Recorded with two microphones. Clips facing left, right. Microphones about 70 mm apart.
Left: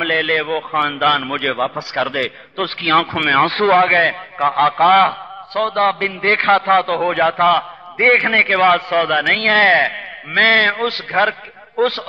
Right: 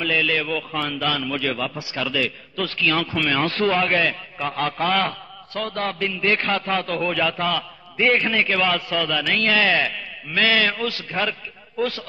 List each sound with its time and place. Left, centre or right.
0.0 s a man's voice: left